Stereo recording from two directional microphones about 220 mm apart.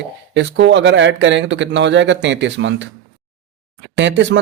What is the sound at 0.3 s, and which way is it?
Speech, 55° right (ahead or behind).